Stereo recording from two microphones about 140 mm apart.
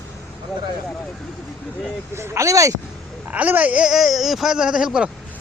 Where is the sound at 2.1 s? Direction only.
20° right (ahead or behind).